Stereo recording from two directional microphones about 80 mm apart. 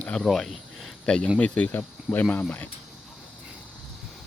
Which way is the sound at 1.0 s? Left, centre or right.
Centre.